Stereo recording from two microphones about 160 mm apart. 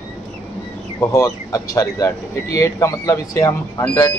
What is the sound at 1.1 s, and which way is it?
Speech, 20° left (ahead or behind).